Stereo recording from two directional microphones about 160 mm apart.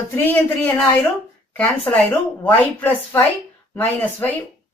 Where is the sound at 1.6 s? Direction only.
10° left (ahead or behind).